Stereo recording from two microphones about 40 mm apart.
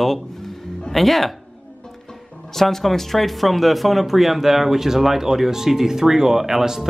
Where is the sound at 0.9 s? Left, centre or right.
Centre.